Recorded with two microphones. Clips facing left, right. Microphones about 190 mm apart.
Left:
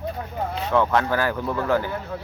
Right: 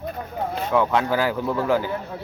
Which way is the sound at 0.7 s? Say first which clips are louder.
Even; 10° right (ahead or behind).